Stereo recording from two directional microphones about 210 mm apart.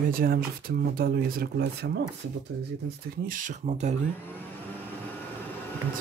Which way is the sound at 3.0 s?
40° right (ahead or behind).